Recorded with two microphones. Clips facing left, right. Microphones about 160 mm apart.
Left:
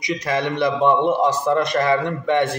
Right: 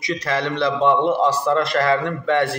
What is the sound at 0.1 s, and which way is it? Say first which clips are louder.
A man's voice: left 1 dB; 15° left (ahead or behind).